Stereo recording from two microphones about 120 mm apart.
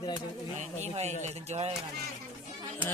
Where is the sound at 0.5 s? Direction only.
75° right (ahead or behind).